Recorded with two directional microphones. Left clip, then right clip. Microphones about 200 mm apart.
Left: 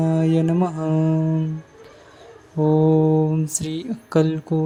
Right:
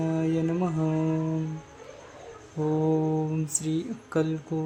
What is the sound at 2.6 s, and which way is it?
Speech, 25° left (ahead or behind).